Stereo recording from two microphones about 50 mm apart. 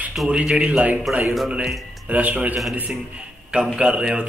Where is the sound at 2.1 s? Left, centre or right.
Right.